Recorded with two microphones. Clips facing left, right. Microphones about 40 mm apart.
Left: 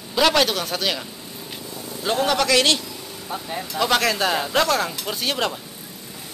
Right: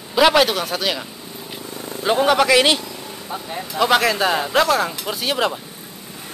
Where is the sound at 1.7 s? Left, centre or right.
Right.